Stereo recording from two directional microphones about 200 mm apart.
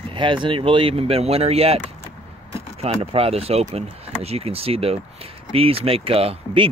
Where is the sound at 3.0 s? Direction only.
30° right (ahead or behind).